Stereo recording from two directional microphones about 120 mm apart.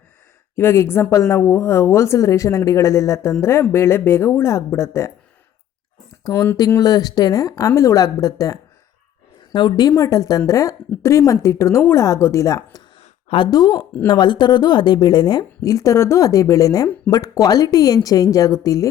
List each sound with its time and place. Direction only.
0.5 s a woman's voice: 20° left (ahead or behind)
6.2 s a woman's voice: 25° left (ahead or behind)
6.7 s a woman's voice: 30° left (ahead or behind)
13.0 s a sound: 55° left (ahead or behind)
13.5 s a woman's voice: 35° left (ahead or behind)